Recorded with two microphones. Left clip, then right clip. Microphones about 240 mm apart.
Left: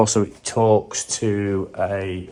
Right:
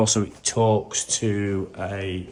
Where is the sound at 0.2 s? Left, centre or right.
Left.